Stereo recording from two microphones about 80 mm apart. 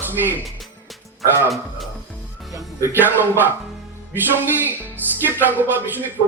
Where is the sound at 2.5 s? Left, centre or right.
Right.